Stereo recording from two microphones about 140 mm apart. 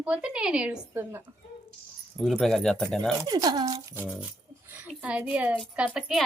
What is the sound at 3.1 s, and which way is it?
Speech, 25° right (ahead or behind).